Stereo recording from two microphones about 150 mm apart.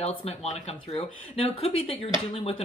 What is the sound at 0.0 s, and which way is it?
Speech, 45° left (ahead or behind).